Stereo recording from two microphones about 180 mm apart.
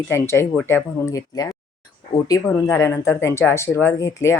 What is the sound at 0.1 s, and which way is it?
A woman's voice, 15° left (ahead or behind).